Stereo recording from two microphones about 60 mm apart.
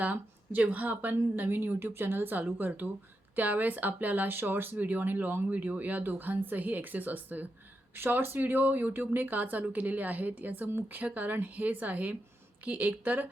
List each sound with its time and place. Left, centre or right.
0.0 s speech: right
5.5 s speech: right
11.0 s speech: right